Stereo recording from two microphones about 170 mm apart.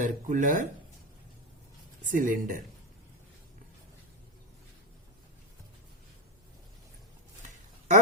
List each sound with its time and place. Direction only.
0.0 s speech: 50° right (ahead or behind)
2.0 s speech: 50° right (ahead or behind)